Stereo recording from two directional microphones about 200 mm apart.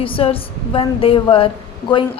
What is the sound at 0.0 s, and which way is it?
Speech, 30° left (ahead or behind).